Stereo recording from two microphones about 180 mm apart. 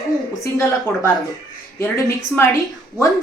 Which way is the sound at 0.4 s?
15° left (ahead or behind).